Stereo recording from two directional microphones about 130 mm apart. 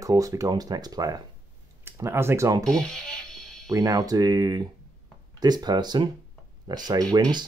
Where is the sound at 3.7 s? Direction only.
30° right (ahead or behind).